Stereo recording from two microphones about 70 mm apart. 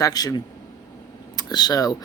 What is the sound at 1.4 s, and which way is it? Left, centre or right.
Speech, left.